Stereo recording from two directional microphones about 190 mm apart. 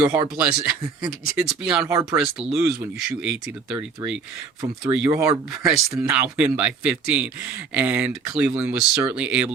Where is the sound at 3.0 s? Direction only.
5° right (ahead or behind).